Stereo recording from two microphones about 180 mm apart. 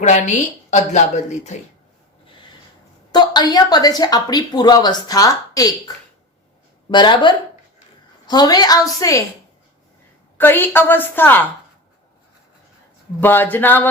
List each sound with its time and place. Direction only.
0.7 s a woman's voice: 40° left (ahead or behind)
3.1 s a woman's voice: 25° left (ahead or behind)
6.9 s a woman's voice: 25° left (ahead or behind)
10.3 s a woman's voice: 10° left (ahead or behind)
13.1 s a woman's voice: 10° left (ahead or behind)